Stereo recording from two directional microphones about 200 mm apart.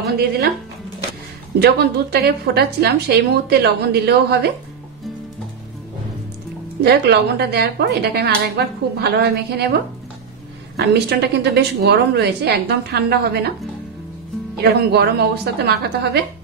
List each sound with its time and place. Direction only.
1.6 s a woman's voice: 55° right (ahead or behind)
6.8 s a woman's voice: 55° right (ahead or behind)
10.8 s a woman's voice: 55° right (ahead or behind)
14.6 s a woman's voice: 55° right (ahead or behind)